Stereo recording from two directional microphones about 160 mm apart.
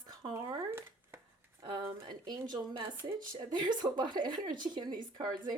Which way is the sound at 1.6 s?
25° right (ahead or behind).